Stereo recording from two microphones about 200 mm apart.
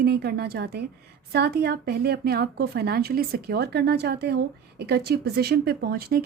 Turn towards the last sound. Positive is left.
turn(degrees=-50)  # may be behind; listen again after turning